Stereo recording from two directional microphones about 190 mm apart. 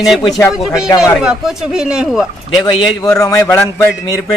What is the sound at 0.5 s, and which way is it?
Speech, 5° right (ahead or behind).